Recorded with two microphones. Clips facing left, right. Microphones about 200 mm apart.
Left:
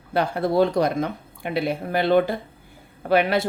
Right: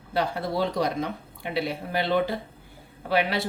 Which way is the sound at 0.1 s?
55° left (ahead or behind).